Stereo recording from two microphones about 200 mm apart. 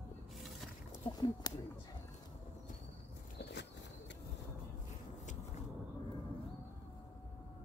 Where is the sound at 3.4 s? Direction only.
60° left (ahead or behind).